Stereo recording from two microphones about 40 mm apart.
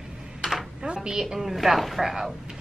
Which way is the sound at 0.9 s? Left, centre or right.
Centre.